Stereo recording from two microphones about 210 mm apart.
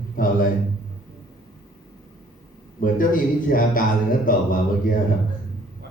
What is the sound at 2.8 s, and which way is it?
A man's voice, 40° left (ahead or behind).